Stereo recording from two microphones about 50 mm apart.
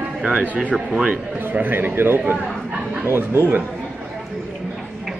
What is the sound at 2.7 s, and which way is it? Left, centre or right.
Speech, right.